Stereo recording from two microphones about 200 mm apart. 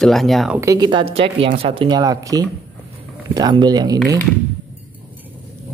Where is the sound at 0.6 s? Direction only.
20° right (ahead or behind).